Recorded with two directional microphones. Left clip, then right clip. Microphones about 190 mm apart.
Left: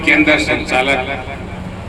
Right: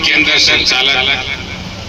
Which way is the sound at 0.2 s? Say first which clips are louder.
Right 3 dB; 45° left (ahead or behind).